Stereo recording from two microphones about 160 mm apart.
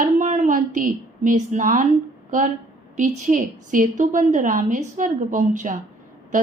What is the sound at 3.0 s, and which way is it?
Speech, 50° right (ahead or behind).